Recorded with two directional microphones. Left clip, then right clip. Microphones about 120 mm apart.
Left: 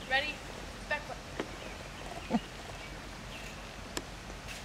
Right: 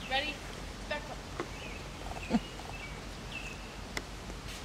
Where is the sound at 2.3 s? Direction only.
10° right (ahead or behind).